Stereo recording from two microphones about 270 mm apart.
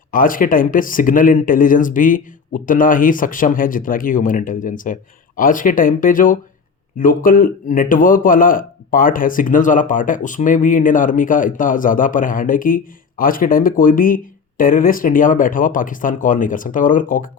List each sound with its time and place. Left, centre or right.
0.1 s speech: left